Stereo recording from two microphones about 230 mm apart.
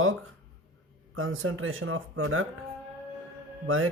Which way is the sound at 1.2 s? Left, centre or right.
Right.